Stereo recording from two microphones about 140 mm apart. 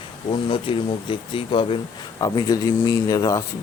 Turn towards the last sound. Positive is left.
turn(degrees=25)  # may be behind; listen again after turning